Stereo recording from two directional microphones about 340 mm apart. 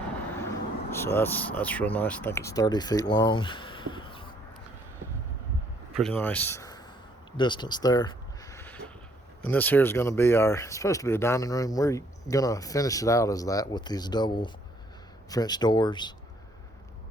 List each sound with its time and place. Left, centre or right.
0.3 s speech: centre
5.9 s a man's voice: centre
7.3 s a sound: centre
9.4 s speech: centre